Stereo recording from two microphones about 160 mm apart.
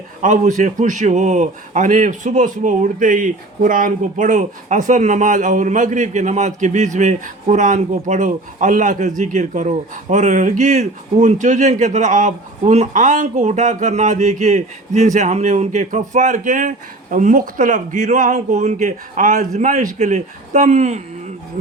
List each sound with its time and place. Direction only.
0.2 s a man's voice: 50° right (ahead or behind)